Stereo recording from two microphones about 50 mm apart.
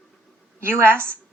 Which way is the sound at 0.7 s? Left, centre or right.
Right.